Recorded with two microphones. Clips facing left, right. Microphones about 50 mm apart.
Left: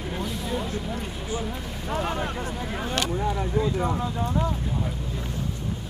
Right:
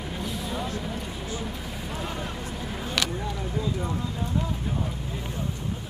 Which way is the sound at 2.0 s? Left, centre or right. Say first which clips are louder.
Left 4 dB; left.